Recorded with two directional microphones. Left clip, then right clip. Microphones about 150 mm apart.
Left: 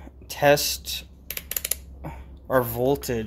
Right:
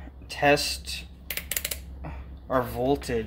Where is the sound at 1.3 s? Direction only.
30° left (ahead or behind).